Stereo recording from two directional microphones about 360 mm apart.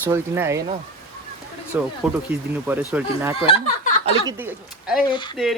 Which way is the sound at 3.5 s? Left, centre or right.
Centre.